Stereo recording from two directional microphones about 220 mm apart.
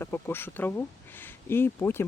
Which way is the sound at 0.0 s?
10° left (ahead or behind).